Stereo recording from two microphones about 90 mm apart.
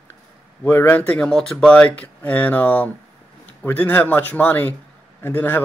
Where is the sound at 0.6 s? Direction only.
20° left (ahead or behind).